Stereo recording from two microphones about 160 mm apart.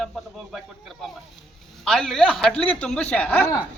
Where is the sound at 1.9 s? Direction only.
Centre (ahead or behind).